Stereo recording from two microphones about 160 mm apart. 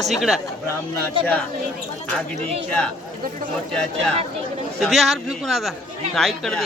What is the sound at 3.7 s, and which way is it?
A man's voice, 5° left (ahead or behind).